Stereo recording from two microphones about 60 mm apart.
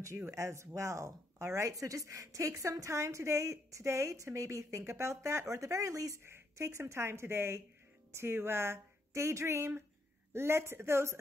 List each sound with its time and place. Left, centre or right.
0.0 s speech: right
6.2 s speech: right